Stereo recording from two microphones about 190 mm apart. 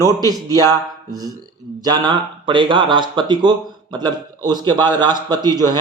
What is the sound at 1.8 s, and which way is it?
Speech, 20° right (ahead or behind).